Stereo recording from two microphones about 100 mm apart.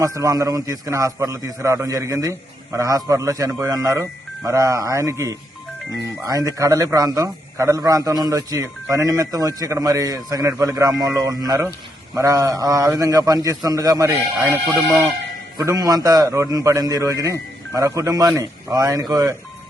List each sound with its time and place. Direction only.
0.0 s speech: 30° right (ahead or behind)
15.5 s speech: 35° right (ahead or behind)